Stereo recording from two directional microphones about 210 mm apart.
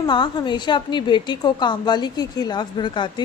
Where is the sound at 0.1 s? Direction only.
20° left (ahead or behind).